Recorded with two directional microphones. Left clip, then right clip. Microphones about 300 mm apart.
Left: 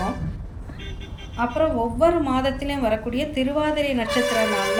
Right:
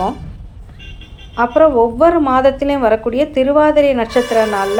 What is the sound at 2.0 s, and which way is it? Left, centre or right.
A woman's voice, centre.